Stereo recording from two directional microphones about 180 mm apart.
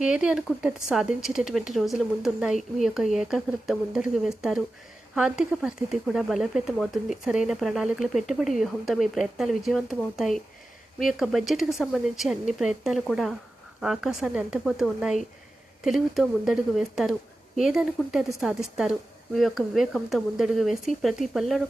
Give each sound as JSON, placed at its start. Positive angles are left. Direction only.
{"t": 0.0, "sound": "speech", "side_deg": -5}